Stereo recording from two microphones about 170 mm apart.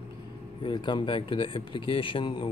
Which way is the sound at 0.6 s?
30° left (ahead or behind).